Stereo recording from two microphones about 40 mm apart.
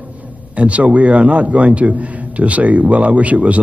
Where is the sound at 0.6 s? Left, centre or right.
Right.